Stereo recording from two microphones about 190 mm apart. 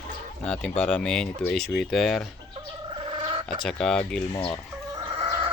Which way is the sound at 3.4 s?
Centre (ahead or behind).